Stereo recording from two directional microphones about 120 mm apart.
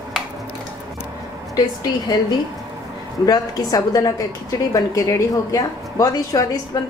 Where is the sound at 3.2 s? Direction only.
30° left (ahead or behind).